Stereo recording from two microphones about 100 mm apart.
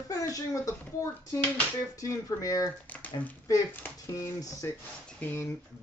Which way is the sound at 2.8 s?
15° left (ahead or behind).